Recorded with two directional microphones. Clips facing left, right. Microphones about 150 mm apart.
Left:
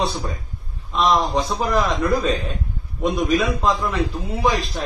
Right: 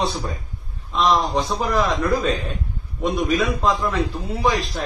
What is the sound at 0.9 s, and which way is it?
A man's voice, centre (ahead or behind).